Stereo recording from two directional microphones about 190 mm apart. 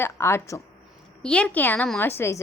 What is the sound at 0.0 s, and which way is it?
A woman's voice, 15° left (ahead or behind).